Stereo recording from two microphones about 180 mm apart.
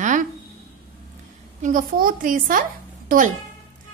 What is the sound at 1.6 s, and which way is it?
A woman's voice, 50° right (ahead or behind).